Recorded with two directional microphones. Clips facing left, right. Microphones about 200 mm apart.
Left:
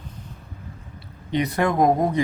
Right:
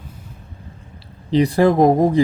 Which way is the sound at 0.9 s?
30° right (ahead or behind).